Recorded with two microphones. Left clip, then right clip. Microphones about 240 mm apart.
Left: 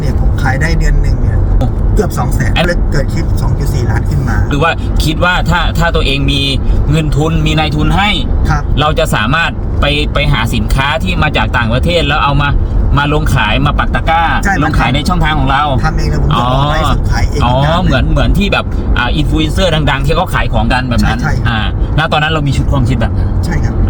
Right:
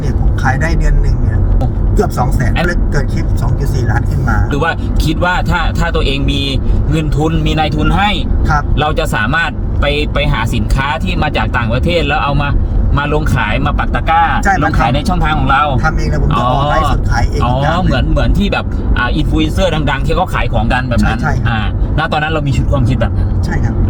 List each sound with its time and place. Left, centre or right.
0.4 s speech: centre
2.0 s speech: centre
4.5 s speech: centre
15.8 s speech: centre
16.3 s speech: centre